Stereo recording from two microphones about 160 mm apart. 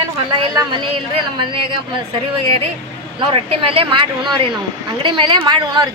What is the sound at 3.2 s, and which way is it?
Speech, 35° right (ahead or behind).